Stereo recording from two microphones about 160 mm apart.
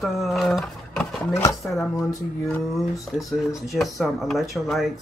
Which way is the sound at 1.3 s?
20° left (ahead or behind).